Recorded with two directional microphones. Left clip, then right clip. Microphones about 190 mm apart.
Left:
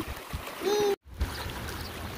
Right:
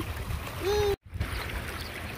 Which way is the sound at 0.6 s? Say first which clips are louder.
Left 1 dB; 40° left (ahead or behind).